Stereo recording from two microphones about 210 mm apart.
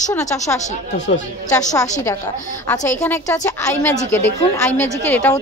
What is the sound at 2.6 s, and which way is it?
A woman's voice, 10° left (ahead or behind).